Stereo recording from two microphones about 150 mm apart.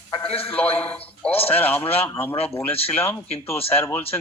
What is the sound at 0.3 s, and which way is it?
Speech, 40° left (ahead or behind).